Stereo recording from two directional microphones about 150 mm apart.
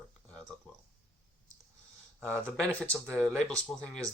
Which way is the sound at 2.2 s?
15° right (ahead or behind).